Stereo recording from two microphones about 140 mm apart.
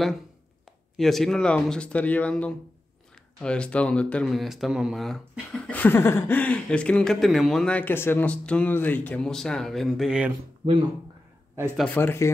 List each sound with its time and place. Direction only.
0.9 s speech: centre (ahead or behind)
11.9 s speech: 15° left (ahead or behind)